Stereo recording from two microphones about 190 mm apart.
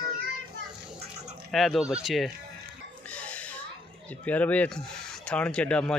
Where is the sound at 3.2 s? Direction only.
5° left (ahead or behind).